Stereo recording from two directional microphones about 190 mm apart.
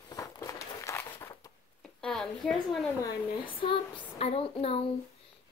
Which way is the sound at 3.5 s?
25° left (ahead or behind).